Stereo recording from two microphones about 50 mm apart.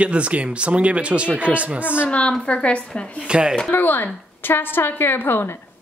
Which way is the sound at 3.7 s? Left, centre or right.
Left.